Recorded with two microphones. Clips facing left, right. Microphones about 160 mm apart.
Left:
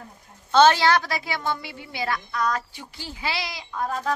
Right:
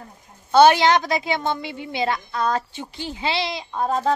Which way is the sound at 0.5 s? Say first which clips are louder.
Right 3 dB; 15° right (ahead or behind).